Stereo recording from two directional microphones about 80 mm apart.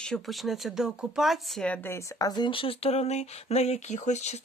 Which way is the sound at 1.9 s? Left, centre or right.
Left.